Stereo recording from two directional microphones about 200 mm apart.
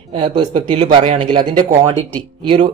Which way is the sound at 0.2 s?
25° right (ahead or behind).